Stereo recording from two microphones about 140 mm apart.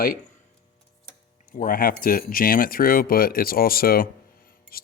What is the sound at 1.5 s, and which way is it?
Speech, 90° left.